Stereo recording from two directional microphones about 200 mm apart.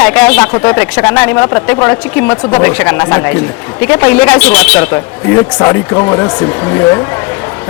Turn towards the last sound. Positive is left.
turn(degrees=5)  # may be behind; listen again after turning